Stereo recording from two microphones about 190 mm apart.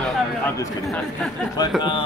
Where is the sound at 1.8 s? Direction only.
25° left (ahead or behind).